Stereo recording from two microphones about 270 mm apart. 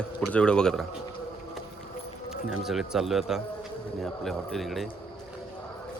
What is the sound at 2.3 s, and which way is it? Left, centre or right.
Speech, centre.